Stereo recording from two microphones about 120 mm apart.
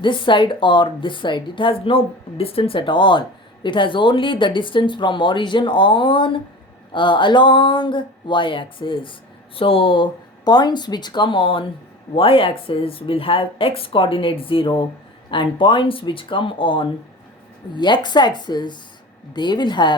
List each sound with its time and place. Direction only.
0.0 s speech: 40° left (ahead or behind)